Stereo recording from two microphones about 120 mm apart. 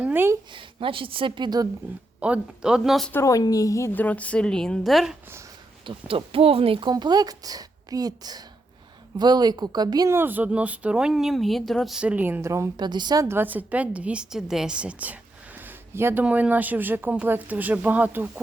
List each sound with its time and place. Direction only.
0.0 s speech: 20° right (ahead or behind)
0.5 s speech: 45° right (ahead or behind)
2.2 s speech: 10° right (ahead or behind)
3.1 s a woman's voice: 25° left (ahead or behind); by 5.1 s centre (ahead or behind)
5.8 s speech: 45° right (ahead or behind)
6.9 s a woman's voice: 35° right (ahead or behind)
10.1 s speech: 15° right (ahead or behind)
12.7 s a woman's voice: 35° right (ahead or behind)
13.2 s a woman's voice: 20° right (ahead or behind)